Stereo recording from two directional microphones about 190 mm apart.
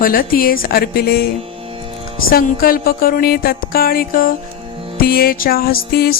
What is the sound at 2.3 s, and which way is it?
Music, 50° left (ahead or behind).